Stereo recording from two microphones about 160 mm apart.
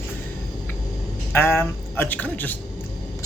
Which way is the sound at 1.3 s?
15° left (ahead or behind).